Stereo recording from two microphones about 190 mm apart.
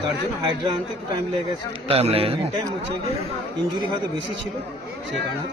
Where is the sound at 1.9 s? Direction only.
30° right (ahead or behind).